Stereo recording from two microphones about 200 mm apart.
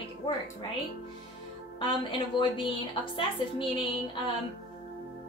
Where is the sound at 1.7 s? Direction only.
25° left (ahead or behind).